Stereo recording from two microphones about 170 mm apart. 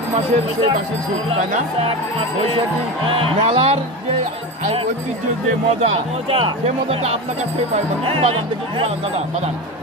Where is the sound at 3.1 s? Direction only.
30° right (ahead or behind).